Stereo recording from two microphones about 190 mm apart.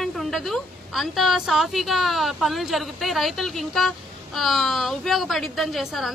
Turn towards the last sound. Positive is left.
turn(degrees=0)  # may be behind; listen again after turning